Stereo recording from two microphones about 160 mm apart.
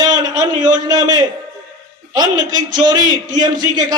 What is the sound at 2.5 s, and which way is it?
Speech, 55° right (ahead or behind).